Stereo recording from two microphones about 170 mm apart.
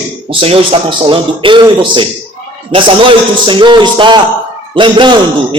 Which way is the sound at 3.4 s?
30° right (ahead or behind).